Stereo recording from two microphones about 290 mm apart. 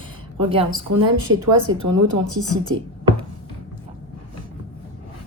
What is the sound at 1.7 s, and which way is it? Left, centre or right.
Speech, right.